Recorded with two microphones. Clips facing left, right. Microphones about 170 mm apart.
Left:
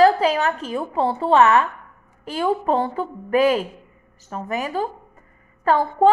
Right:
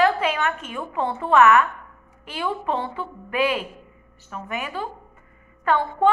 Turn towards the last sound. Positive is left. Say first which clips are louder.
# left 3 dB
turn(degrees=35)  # may be behind; listen again after turning